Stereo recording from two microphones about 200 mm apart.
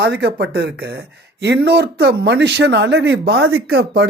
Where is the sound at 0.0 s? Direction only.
55° right (ahead or behind).